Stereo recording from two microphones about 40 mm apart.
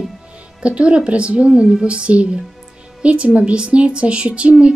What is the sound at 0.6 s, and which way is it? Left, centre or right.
Speech, right.